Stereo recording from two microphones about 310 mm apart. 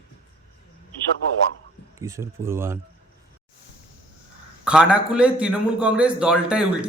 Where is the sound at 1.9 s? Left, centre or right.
Centre.